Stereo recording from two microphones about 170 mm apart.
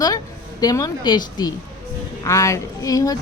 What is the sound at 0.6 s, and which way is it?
Speech, 20° left (ahead or behind).